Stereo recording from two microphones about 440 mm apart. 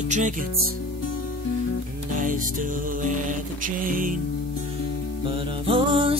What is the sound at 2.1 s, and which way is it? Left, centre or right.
Music, centre.